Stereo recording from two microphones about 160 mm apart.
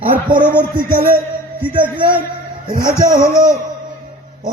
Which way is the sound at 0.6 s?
60° right (ahead or behind).